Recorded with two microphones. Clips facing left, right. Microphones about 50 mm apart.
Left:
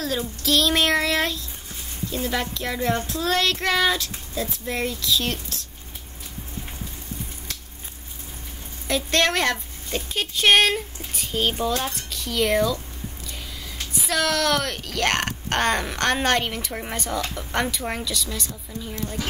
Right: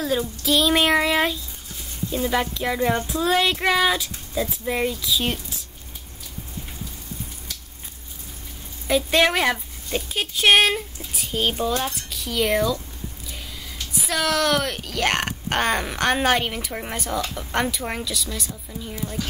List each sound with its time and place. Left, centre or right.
0.4 s speech: centre
8.8 s speech: centre
13.9 s speech: centre